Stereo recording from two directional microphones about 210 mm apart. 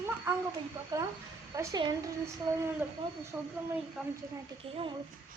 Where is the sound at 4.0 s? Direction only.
5° right (ahead or behind).